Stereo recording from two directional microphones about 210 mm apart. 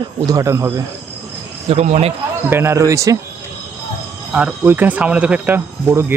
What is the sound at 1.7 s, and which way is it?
Speech, 30° right (ahead or behind).